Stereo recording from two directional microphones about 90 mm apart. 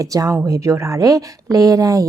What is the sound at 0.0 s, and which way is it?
A woman's voice, 40° right (ahead or behind).